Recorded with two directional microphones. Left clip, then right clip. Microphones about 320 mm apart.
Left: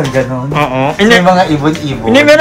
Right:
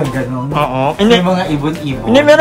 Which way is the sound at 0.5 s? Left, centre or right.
Centre.